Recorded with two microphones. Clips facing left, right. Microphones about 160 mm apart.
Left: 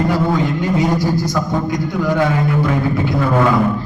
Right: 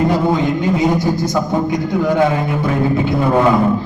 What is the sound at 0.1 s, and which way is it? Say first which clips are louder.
A man's voice: right 2 dB; 20° right (ahead or behind).